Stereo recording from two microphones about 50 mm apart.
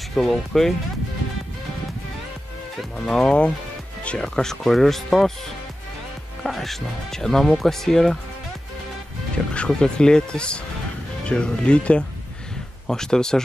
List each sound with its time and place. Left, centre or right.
0.1 s speech: centre
3.1 s speech: centre
4.4 s speech: centre
6.4 s speech: centre
9.7 s speech: centre